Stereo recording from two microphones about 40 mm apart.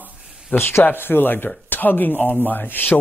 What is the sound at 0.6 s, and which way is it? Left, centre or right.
Speech, left.